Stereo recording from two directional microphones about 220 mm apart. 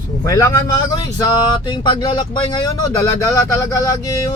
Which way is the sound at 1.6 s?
20° left (ahead or behind).